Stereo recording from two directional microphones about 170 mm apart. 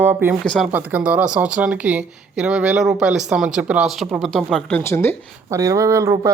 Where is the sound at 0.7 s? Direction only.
10° right (ahead or behind).